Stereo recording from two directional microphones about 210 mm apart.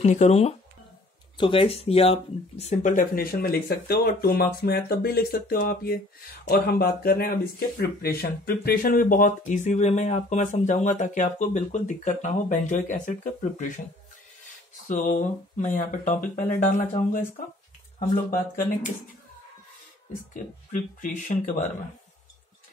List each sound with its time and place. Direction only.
0.0 s speech: 35° left (ahead or behind)
14.9 s speech: 40° left (ahead or behind)
20.3 s speech: 40° left (ahead or behind)